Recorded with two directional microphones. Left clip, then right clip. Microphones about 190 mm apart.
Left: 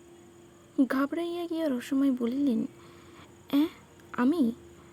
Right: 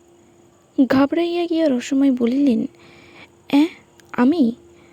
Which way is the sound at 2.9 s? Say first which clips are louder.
Right 7 dB; 35° right (ahead or behind).